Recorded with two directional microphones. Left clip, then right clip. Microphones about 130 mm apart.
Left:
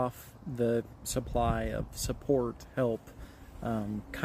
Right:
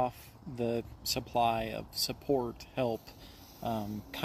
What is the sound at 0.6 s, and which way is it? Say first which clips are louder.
Speech: left 4 dB; 45° left (ahead or behind).